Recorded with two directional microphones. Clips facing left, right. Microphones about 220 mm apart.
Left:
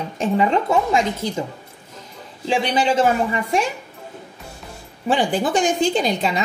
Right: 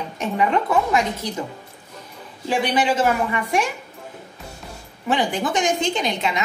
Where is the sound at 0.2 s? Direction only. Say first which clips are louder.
Left 3 dB; 30° left (ahead or behind).